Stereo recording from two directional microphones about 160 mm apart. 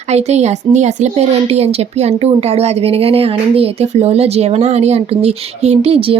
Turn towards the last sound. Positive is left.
turn(degrees=-40)  # may be behind; listen again after turning